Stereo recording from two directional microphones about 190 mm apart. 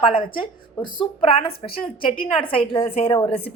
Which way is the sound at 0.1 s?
25° left (ahead or behind).